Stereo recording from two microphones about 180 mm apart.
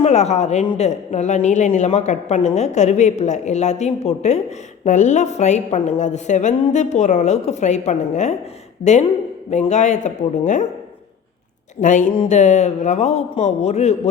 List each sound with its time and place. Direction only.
0.0 s a woman's voice: 40° left (ahead or behind)
11.8 s a woman's voice: 45° left (ahead or behind)